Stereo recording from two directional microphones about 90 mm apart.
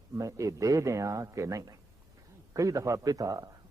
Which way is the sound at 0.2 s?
35° right (ahead or behind).